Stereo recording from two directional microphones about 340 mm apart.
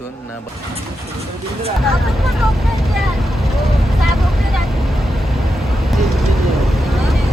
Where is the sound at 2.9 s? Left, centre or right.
Centre.